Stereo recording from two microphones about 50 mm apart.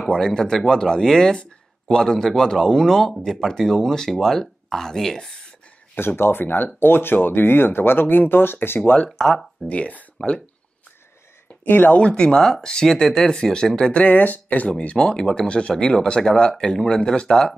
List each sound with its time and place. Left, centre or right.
0.1 s speech: centre
5.9 s speech: left
9.2 s speech: centre
9.7 s speech: left
11.6 s speech: left
12.0 s speech: centre
14.0 s speech: left
14.7 s speech: centre